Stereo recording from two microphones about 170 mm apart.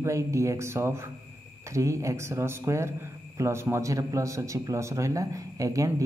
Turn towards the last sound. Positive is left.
turn(degrees=-20)  # may be behind; listen again after turning